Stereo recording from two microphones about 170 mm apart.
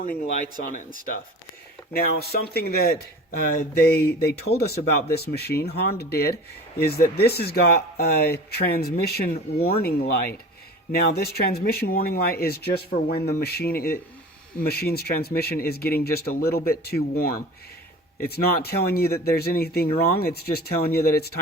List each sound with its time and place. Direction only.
0.6 s speech: 55° left (ahead or behind)
1.9 s speech: 65° left (ahead or behind)